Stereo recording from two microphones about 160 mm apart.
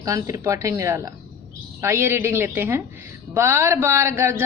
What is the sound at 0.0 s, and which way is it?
A man's voice, 20° right (ahead or behind).